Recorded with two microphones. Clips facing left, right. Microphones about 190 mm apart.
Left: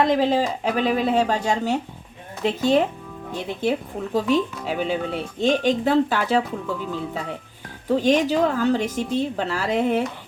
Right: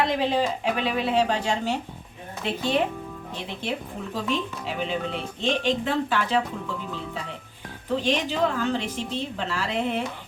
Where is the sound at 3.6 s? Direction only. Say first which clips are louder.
Left 8 dB; 40° left (ahead or behind).